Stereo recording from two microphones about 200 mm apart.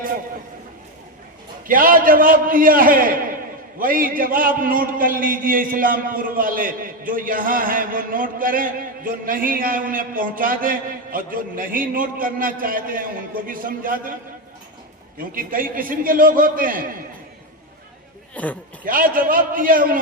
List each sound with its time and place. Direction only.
1.6 s a man's voice: 45° right (ahead or behind)
15.4 s a man's voice: 45° right (ahead or behind)
18.4 s a man's voice: 5° left (ahead or behind)
18.9 s a man's voice: 45° right (ahead or behind)